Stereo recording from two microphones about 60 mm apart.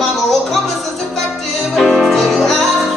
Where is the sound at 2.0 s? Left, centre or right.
Centre.